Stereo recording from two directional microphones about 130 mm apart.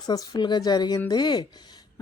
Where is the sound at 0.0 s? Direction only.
30° left (ahead or behind).